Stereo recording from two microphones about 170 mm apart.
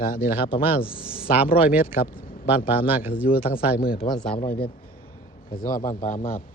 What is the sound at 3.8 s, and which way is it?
Speech, 60° left (ahead or behind).